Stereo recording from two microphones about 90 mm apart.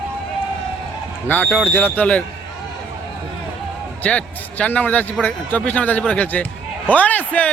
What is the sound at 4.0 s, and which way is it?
A man's voice, 15° left (ahead or behind).